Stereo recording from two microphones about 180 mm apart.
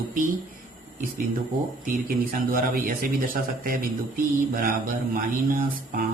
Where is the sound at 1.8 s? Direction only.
50° right (ahead or behind).